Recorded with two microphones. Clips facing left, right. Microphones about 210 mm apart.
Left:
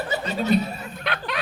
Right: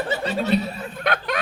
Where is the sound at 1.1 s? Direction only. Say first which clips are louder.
Right 4 dB; 45° right (ahead or behind).